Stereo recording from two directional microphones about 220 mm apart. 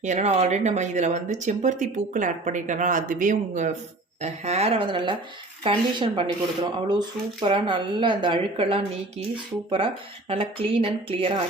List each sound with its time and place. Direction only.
0.0 s speech: 30° right (ahead or behind)